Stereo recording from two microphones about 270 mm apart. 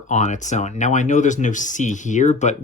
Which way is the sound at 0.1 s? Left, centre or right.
Left.